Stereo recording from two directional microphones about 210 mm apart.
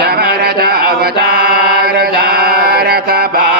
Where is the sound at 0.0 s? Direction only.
50° right (ahead or behind).